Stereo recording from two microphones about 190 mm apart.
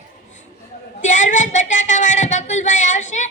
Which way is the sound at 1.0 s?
40° left (ahead or behind).